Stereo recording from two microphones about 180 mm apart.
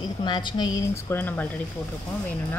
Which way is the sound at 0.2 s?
25° left (ahead or behind).